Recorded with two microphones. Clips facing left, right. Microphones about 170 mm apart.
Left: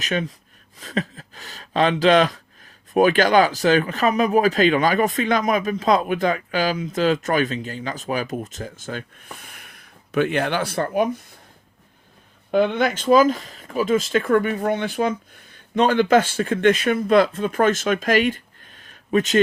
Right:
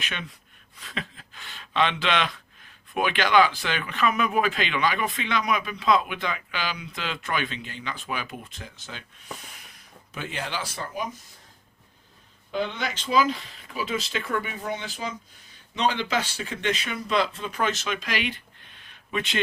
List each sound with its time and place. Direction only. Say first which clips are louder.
0.0 s speech: left 12 dB; 40° left (ahead or behind); by 11.2 s 60° left (ahead or behind)
12.5 s speech: left 10 dB; 55° left (ahead or behind)